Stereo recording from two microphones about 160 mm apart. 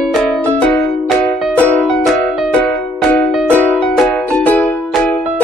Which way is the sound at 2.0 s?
Centre (ahead or behind).